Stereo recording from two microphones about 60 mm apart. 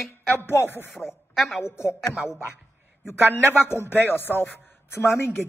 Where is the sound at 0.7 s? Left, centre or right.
Left.